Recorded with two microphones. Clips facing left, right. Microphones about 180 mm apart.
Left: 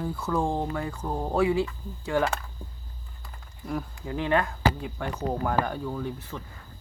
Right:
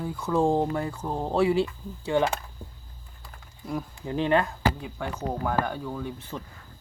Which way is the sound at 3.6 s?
25° right (ahead or behind).